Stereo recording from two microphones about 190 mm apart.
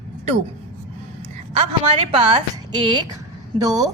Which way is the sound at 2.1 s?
25° right (ahead or behind).